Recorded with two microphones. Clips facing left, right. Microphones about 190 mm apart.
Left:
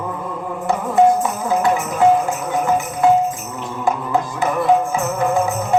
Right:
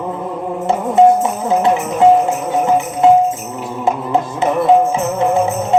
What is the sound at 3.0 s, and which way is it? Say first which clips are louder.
Music: right 4 dB; 25° right (ahead or behind).